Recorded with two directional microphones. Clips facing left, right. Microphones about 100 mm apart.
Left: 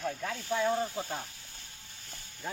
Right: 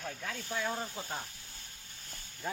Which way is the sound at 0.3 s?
45° left (ahead or behind).